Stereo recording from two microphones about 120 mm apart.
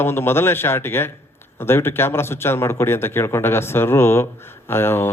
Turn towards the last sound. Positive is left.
turn(degrees=20)  # may be behind; listen again after turning